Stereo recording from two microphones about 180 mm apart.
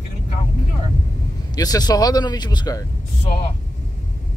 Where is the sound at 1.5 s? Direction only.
20° left (ahead or behind).